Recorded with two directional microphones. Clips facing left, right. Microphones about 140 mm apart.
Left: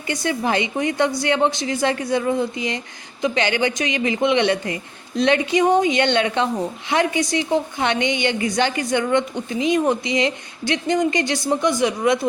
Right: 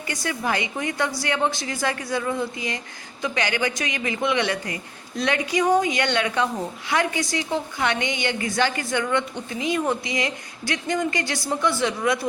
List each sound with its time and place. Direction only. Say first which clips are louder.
0.1 s a woman's voice: left 5 dB; 25° left (ahead or behind)